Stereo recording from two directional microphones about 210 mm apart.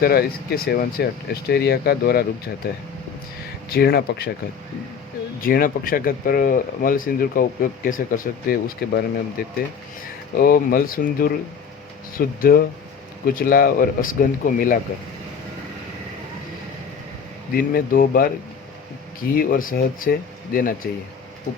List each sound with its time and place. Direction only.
0.0 s speech: 45° left (ahead or behind)
3.7 s speech: 50° left (ahead or behind)
5.4 s speech: 45° left (ahead or behind)
17.5 s speech: 45° left (ahead or behind)
19.3 s speech: 40° left (ahead or behind)